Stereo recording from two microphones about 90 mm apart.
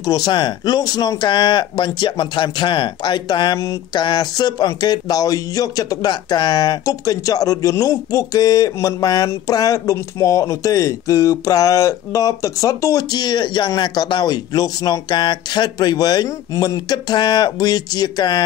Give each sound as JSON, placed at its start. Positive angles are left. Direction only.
{"t": 0.0, "sound": "speech", "side_deg": 45}
{"t": 0.3, "sound": "speech", "side_deg": 55}